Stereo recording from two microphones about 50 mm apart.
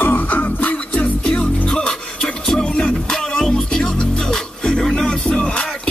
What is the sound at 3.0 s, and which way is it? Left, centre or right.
Music, centre.